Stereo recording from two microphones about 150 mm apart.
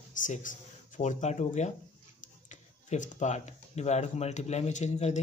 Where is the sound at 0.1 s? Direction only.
60° left (ahead or behind).